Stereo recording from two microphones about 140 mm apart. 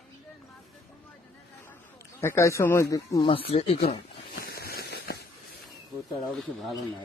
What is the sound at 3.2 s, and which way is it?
Speech, 45° left (ahead or behind).